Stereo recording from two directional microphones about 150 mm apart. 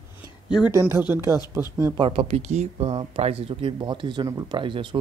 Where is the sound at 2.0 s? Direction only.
35° right (ahead or behind).